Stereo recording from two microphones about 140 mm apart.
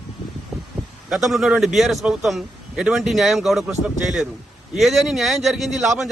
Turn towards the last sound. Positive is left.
turn(degrees=-5)  # may be behind; listen again after turning